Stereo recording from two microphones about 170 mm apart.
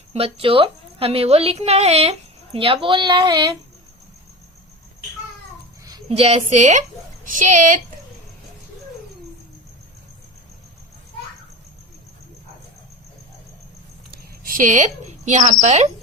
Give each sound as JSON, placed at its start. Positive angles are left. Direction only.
{"t": 0.1, "sound": "a woman's voice", "side_deg": -35}
{"t": 6.1, "sound": "a woman's voice", "side_deg": -35}
{"t": 14.1, "sound": "a sound", "side_deg": -55}
{"t": 15.6, "sound": "a woman's voice", "side_deg": -40}